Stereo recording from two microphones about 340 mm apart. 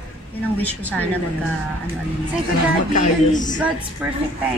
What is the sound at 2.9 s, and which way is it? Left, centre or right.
Speech, left.